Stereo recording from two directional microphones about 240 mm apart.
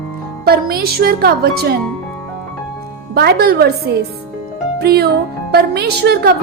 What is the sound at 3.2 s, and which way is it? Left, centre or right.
A woman's voice, right.